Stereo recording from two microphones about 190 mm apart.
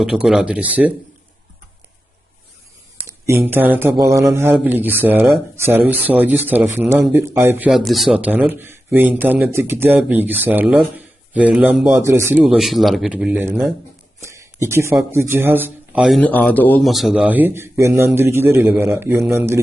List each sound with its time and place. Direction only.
0.0 s speech: 5° right (ahead or behind)
3.2 s speech: 10° right (ahead or behind)
14.2 s a sound: 15° right (ahead or behind)
15.1 s speech: 10° right (ahead or behind)